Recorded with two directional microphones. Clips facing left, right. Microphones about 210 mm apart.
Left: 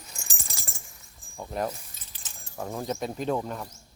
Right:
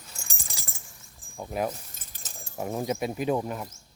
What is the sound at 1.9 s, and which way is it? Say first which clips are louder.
Keys jangling: right 2 dB; 45° right (ahead or behind).